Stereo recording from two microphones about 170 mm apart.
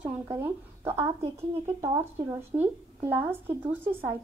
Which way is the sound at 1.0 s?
35° right (ahead or behind).